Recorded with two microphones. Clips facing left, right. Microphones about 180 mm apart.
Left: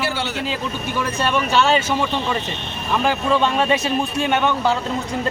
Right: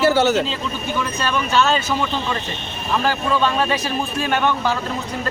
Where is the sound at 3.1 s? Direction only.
25° left (ahead or behind).